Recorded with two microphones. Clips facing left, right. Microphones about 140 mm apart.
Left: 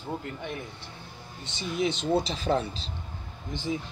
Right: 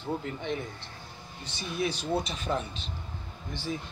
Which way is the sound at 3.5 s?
20° left (ahead or behind).